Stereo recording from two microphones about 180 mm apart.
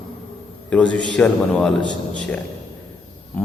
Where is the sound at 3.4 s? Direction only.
5° left (ahead or behind).